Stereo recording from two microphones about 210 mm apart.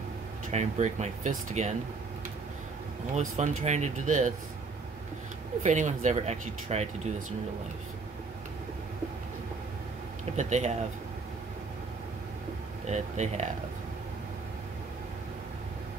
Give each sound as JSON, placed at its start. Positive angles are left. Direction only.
{"t": 0.5, "sound": "speech", "side_deg": -35}
{"t": 3.2, "sound": "speech", "side_deg": -35}
{"t": 5.6, "sound": "speech", "side_deg": -35}
{"t": 10.3, "sound": "speech", "side_deg": -35}
{"t": 12.8, "sound": "speech", "side_deg": -35}